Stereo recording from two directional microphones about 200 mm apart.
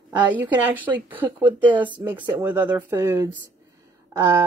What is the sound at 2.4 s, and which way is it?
Speech, 10° right (ahead or behind).